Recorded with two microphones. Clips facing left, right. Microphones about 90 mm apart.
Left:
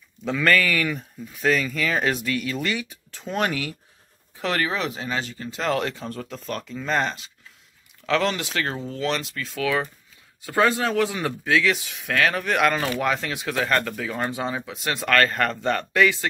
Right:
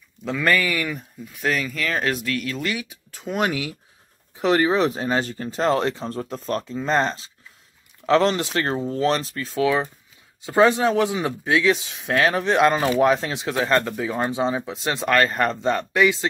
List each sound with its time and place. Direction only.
0.2 s speech: 5° right (ahead or behind)
4.4 s speech: 20° right (ahead or behind)